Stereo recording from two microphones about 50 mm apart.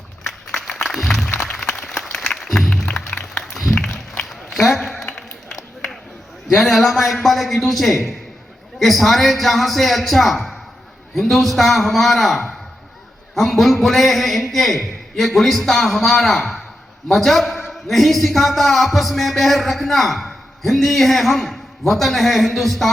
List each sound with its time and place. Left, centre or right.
0.6 s music: centre
1.3 s applause: left
1.6 s applause: centre
2.0 s music: centre
3.4 s a sound: centre
6.5 s a man's voice: centre